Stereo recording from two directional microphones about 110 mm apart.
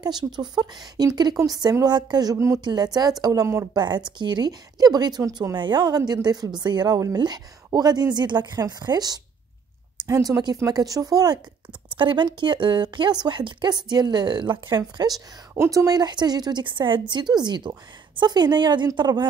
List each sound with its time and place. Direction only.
0.0 s a woman's voice: 40° right (ahead or behind)
2.3 s speech: 25° right (ahead or behind)
2.6 s a woman's voice: 40° right (ahead or behind)
3.7 s a woman's voice: 40° right (ahead or behind)
12.0 s a woman's voice: 45° right (ahead or behind)